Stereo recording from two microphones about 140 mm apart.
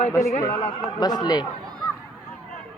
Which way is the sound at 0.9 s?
30° left (ahead or behind).